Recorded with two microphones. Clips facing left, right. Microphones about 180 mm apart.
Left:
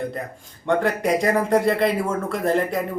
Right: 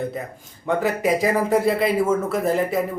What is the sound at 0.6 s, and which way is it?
Speech, 5° right (ahead or behind).